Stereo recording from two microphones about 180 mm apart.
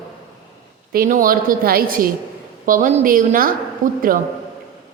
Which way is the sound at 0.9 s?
50° right (ahead or behind).